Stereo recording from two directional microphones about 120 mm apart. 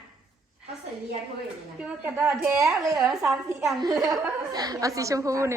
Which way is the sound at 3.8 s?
30° right (ahead or behind).